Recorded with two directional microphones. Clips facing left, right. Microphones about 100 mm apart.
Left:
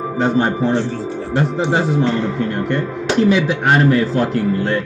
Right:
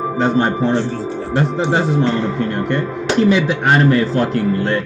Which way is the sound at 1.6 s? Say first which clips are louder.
Even; 5° left (ahead or behind).